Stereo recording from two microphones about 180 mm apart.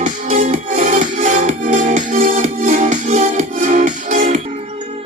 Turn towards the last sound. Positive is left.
turn(degrees=-45)  # may be behind; listen again after turning